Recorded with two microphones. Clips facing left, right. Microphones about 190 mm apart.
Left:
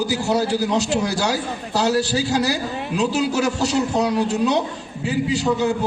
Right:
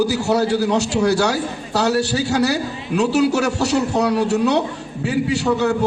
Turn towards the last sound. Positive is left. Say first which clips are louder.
# right 2 dB
turn(degrees=-65)  # may be behind; listen again after turning